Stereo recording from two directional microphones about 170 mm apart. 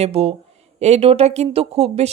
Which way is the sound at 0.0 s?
35° right (ahead or behind).